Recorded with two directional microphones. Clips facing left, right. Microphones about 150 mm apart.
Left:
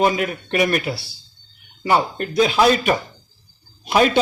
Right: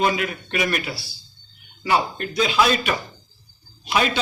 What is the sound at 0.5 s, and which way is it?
A man's voice, 45° left (ahead or behind).